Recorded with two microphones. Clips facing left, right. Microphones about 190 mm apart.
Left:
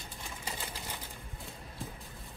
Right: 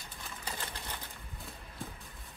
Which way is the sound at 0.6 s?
10° left (ahead or behind).